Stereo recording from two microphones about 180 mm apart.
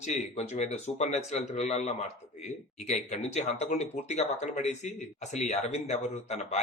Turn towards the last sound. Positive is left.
turn(degrees=35)  # may be behind; listen again after turning